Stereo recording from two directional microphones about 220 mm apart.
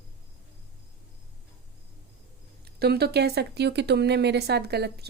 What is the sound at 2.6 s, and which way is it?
Speech, 45° right (ahead or behind).